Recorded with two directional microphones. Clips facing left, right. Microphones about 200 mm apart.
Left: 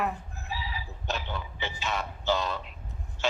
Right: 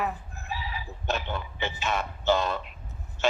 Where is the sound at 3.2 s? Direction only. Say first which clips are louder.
Right 4 dB; 55° right (ahead or behind).